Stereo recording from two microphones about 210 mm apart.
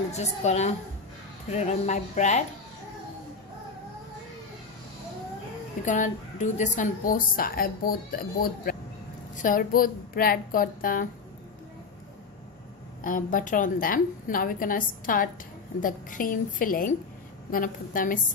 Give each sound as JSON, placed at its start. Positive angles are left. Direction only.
{"t": 0.1, "sound": "a woman's voice", "side_deg": 30}
{"t": 5.8, "sound": "a woman's voice", "side_deg": 35}
{"t": 13.0, "sound": "a woman's voice", "side_deg": 40}